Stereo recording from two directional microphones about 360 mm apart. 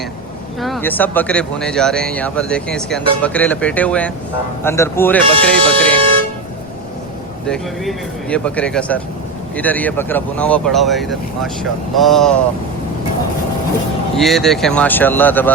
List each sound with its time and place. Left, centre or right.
0.6 s speech: centre
5.2 s speech: centre
6.0 s toot: centre
7.4 s speech: centre
14.2 s speech: centre